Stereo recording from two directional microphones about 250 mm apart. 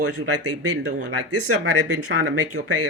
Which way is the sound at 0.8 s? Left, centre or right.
Right.